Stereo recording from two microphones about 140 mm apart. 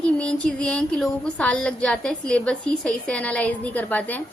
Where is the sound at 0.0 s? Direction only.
5° left (ahead or behind).